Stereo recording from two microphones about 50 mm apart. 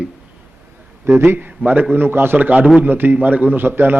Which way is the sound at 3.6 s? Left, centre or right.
Right.